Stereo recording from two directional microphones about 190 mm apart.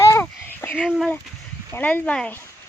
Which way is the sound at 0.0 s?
15° left (ahead or behind).